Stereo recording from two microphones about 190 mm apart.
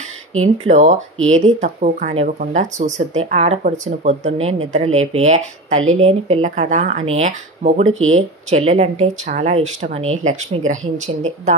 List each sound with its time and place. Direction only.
0.7 s speech: 40° right (ahead or behind)
1.1 s speech: 90° right
1.4 s speech: 40° right (ahead or behind)
5.8 s speech: 90° right
6.0 s speech: 30° right (ahead or behind)
7.9 s speech: 90° right
8.5 s speech: 35° right (ahead or behind)